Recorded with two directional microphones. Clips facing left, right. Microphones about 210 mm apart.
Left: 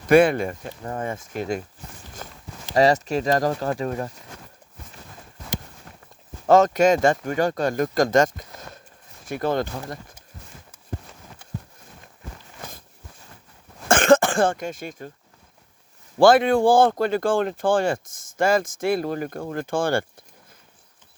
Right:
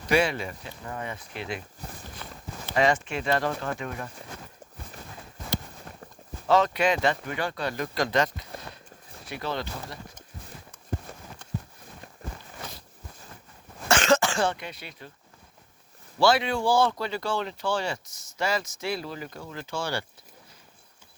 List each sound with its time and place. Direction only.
0.1 s speech: 50° left (ahead or behind)
2.2 s walk: 40° left (ahead or behind)
2.7 s speech: 40° left (ahead or behind)
6.5 s speech: 45° left (ahead or behind)
13.8 s throat clearing: 50° left (ahead or behind)
16.1 s speech: 50° left (ahead or behind)